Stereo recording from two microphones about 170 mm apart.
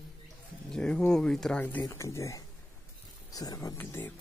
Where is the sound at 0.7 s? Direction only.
5° left (ahead or behind).